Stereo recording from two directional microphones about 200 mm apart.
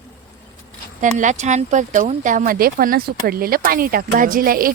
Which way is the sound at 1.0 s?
40° right (ahead or behind).